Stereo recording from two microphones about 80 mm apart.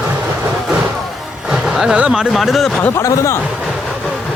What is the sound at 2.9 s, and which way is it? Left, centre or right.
Speech, left.